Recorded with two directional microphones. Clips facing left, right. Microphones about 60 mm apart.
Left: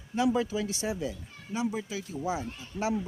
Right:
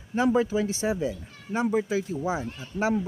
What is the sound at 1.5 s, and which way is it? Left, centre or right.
Speech, right.